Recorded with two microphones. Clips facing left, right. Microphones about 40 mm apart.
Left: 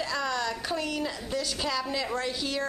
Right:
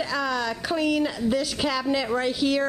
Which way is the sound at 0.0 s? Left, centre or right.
Centre.